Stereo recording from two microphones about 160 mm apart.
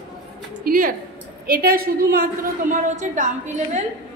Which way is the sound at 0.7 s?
55° right (ahead or behind).